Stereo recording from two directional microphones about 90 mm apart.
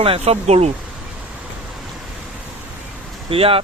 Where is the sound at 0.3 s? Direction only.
90° right.